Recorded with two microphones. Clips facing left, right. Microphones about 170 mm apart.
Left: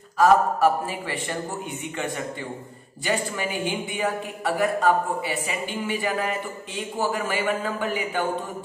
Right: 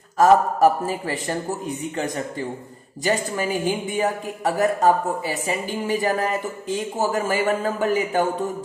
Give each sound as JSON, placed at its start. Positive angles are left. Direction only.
{"t": 0.2, "sound": "a woman's voice", "side_deg": -40}
{"t": 3.1, "sound": "a woman's voice", "side_deg": -40}